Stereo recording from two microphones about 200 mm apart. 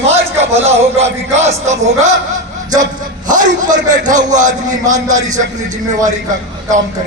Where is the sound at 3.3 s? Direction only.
40° right (ahead or behind).